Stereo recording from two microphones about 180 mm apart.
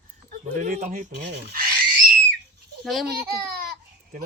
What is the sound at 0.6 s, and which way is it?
Speech, 40° right (ahead or behind).